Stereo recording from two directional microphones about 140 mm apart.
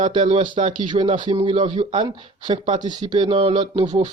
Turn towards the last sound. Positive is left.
turn(degrees=-35)  # may be behind; listen again after turning